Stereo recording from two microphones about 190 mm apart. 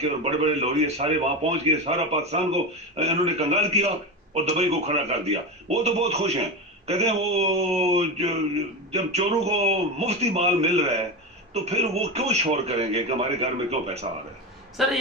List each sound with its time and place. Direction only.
0.3 s speech: 35° right (ahead or behind)
14.8 s a man's voice: centre (ahead or behind)